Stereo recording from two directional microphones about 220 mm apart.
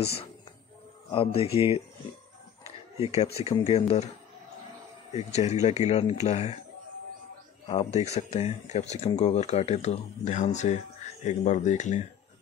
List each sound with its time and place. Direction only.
1.1 s speech: 25° left (ahead or behind)
1.4 s speech: 15° right (ahead or behind)
3.4 s speech: 30° left (ahead or behind)
5.1 s speech: 30° left (ahead or behind)
7.6 s speech: 30° left (ahead or behind)